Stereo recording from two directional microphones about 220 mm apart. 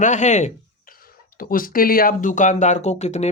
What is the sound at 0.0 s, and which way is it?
Speech, 35° left (ahead or behind).